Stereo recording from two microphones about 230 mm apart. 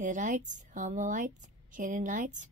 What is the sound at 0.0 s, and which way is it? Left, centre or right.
Speech, right.